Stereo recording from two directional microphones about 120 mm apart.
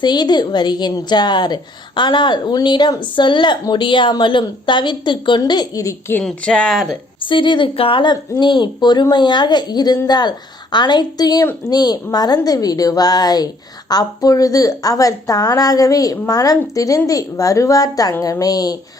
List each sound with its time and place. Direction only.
0.0 s a woman's voice: 35° left (ahead or behind)
6.2 s speech: 10° left (ahead or behind)
7.2 s a woman's voice: 45° left (ahead or behind)